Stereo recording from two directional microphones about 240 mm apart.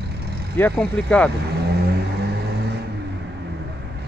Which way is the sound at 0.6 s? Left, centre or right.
Centre.